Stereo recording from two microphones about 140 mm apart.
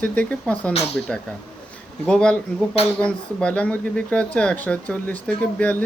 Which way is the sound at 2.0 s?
5° left (ahead or behind).